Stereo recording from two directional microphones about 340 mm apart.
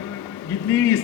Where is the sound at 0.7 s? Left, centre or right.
Centre.